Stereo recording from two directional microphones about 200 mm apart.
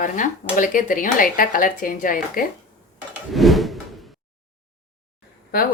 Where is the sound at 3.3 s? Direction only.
Centre (ahead or behind).